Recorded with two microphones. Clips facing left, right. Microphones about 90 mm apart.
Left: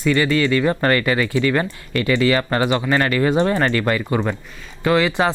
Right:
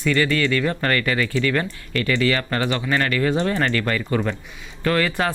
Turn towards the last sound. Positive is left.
turn(degrees=15)  # may be behind; listen again after turning